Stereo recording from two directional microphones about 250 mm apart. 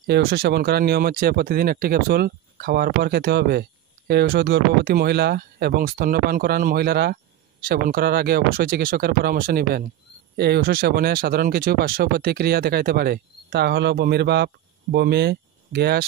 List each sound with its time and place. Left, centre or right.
0.0 s speech: right